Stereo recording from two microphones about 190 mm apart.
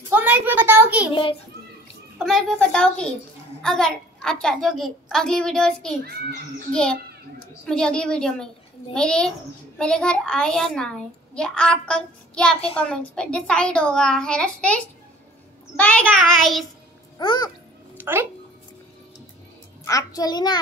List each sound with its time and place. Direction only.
0.1 s a sound: 10° right (ahead or behind)
2.1 s a woman's voice: centre (ahead or behind)
12.5 s a child's voice: 30° left (ahead or behind)
12.8 s a woman's voice: 5° left (ahead or behind)
15.7 s child singing: 10° left (ahead or behind)
17.2 s a child's voice: 25° left (ahead or behind)
17.9 s speech: 10° right (ahead or behind)
19.8 s a child's voice: 20° left (ahead or behind)